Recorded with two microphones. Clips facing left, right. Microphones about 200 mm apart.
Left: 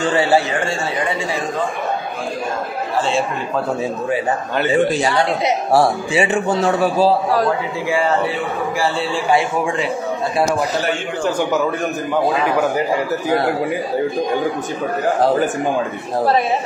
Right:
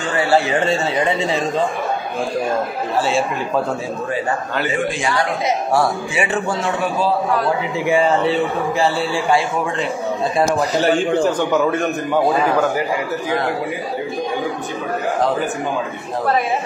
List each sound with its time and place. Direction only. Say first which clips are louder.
0.1 s a man's voice: even; 25° left (ahead or behind)
0.5 s speech: right 3 dB; 20° right (ahead or behind)
4.1 s a man's voice: left 1 dB; 25° left (ahead or behind)
7.8 s speech: right 3 dB; 20° right (ahead or behind)
11.3 s a man's voice: right 1 dB; centre (ahead or behind)